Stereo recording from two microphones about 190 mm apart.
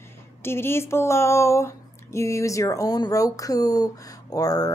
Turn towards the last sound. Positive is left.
turn(degrees=20)  # may be behind; listen again after turning